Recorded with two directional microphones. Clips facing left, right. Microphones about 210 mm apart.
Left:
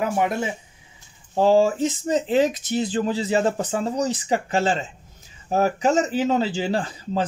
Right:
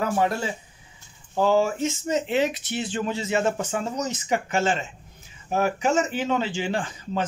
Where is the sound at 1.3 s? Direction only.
30° left (ahead or behind).